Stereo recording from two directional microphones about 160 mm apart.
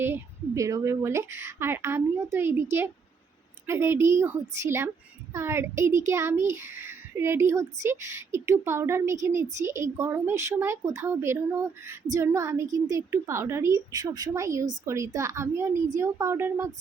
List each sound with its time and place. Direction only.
0.0 s a woman's voice: 15° right (ahead or behind)
3.7 s a woman's voice: 15° right (ahead or behind)